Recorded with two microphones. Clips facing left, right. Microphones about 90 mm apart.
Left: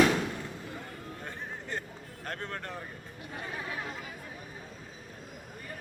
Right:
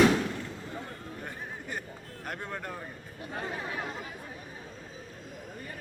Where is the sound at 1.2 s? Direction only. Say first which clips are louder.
Even; 10° right (ahead or behind).